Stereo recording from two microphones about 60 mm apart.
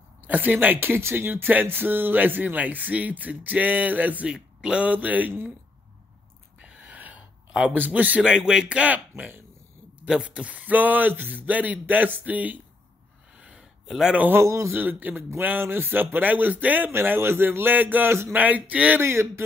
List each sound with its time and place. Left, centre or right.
0.3 s speech: right
0.7 s speech: right
4.3 s speech: centre
6.6 s a sound: right
7.7 s speech: right
8.2 s speech: centre; by 9.4 s right
10.0 s speech: centre
13.4 s a sound: centre
13.8 s a man's voice: centre
14.3 s speech: right
14.7 s speech: right
18.9 s speech: right